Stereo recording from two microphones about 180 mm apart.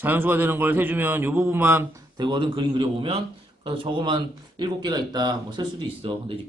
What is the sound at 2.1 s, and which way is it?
Speech, 25° right (ahead or behind).